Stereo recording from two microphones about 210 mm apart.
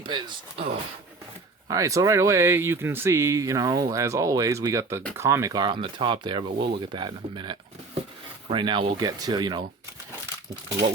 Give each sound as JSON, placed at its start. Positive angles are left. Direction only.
{"t": 0.0, "sound": "speech", "side_deg": -20}